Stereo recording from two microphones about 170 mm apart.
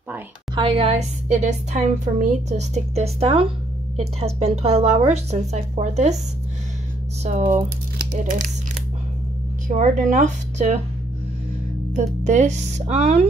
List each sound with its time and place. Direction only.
0.6 s a woman's voice: 30° right (ahead or behind)
7.2 s speech: 45° right (ahead or behind)
9.7 s speech: 45° right (ahead or behind)
11.9 s a woman's voice: 45° right (ahead or behind)